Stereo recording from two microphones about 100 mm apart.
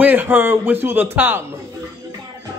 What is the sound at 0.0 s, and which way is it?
A man's voice, 20° right (ahead or behind).